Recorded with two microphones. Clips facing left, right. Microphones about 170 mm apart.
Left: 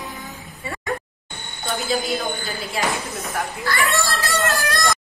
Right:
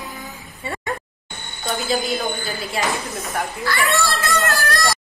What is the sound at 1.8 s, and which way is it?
Child singing, centre (ahead or behind).